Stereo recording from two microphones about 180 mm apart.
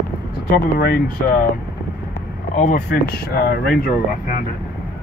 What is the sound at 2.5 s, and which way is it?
Speech, 50° left (ahead or behind).